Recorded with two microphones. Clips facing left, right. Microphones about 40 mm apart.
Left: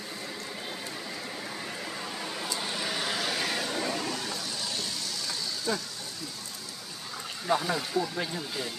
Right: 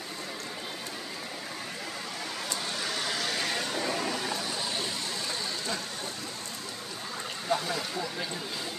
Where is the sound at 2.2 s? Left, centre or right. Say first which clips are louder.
Even; centre.